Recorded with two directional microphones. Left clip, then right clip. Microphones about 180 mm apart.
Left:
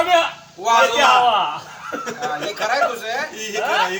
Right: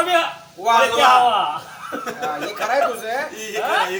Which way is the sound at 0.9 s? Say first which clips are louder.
Even; centre (ahead or behind).